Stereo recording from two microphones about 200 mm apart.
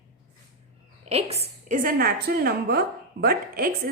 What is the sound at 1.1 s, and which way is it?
A woman's voice, 30° right (ahead or behind).